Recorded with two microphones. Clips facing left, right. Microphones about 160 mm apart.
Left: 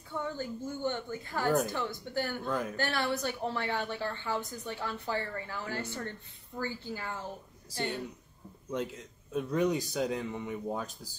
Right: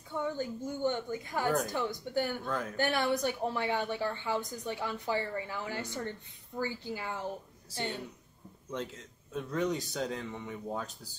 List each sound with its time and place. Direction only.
0.1 s a woman's voice: 15° right (ahead or behind)
2.4 s speech: 10° left (ahead or behind)
2.7 s a woman's voice: 15° right (ahead or behind)
8.7 s speech: 10° left (ahead or behind)